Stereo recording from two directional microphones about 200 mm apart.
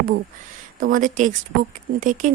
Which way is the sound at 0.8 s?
45° right (ahead or behind).